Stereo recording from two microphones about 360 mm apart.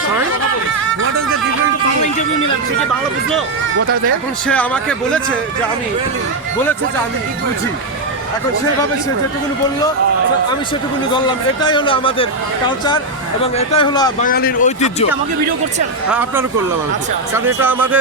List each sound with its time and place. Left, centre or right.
1.0 s speech: right
4.4 s a man's voice: centre
11.6 s speech: centre
14.3 s speech: left
16.0 s a man's voice: centre